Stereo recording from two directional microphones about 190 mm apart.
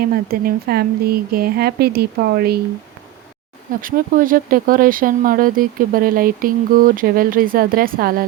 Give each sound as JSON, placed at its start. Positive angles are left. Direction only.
{"t": 0.0, "sound": "speech", "side_deg": -50}
{"t": 3.7, "sound": "speech", "side_deg": -45}